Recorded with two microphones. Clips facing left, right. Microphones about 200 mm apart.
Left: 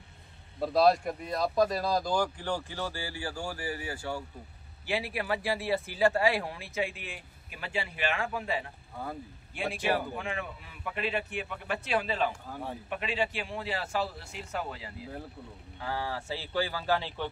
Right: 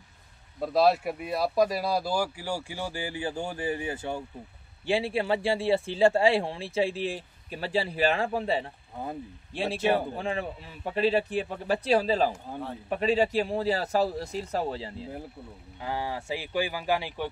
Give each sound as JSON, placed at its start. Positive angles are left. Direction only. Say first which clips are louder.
{"t": 0.6, "sound": "speech", "louder": "right 1 dB", "side_deg": -5}
{"t": 8.9, "sound": "speech", "louder": "right 3 dB", "side_deg": -20}
{"t": 9.5, "sound": "a man's voice", "louder": "right 4 dB", "side_deg": -30}
{"t": 15.8, "sound": "speech", "louder": "right 2 dB", "side_deg": -15}